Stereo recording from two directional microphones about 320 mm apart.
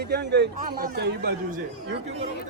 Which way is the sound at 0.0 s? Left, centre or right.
Right.